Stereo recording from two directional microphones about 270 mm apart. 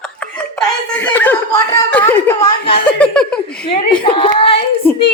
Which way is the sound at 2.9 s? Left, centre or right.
Centre.